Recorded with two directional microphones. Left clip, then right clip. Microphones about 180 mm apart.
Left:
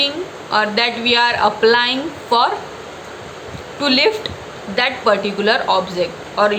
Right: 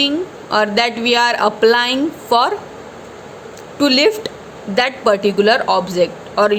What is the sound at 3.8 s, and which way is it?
Speech, 50° right (ahead or behind).